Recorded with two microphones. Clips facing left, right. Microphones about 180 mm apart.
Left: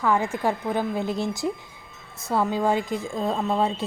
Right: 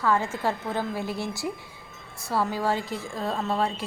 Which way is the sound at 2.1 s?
20° left (ahead or behind).